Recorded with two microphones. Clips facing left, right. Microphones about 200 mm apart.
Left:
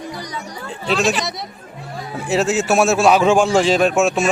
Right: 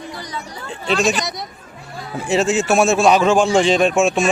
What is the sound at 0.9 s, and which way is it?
A man's voice, centre (ahead or behind).